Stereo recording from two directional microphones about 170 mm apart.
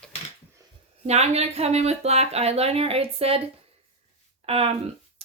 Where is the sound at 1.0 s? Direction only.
40° right (ahead or behind).